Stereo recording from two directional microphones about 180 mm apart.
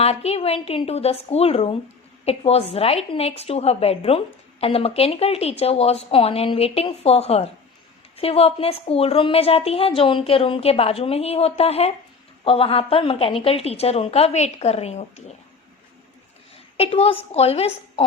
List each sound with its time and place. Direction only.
0.0 s a woman's voice: 35° left (ahead or behind)
16.7 s a woman's voice: 35° left (ahead or behind)